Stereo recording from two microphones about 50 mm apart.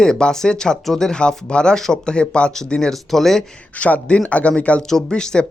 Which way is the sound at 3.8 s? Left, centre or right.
Left.